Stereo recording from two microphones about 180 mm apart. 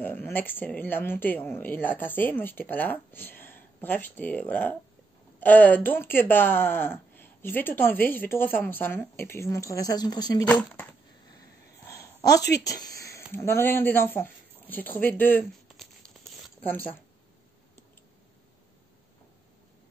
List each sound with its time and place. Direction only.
0.0 s speech: 10° left (ahead or behind)
10.4 s speech: 10° left (ahead or behind)
11.9 s a woman's voice: 20° left (ahead or behind)
13.0 s a sound: 15° left (ahead or behind)
16.6 s speech: 10° left (ahead or behind)